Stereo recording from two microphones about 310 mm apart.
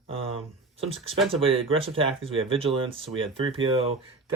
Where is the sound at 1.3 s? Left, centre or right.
Centre.